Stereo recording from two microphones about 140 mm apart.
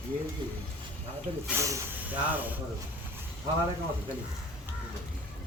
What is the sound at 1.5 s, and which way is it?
Speech, 20° right (ahead or behind).